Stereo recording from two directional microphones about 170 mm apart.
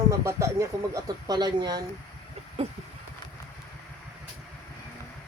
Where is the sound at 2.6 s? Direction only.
35° right (ahead or behind).